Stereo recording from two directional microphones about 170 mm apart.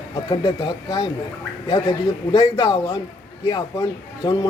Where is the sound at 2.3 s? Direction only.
25° left (ahead or behind).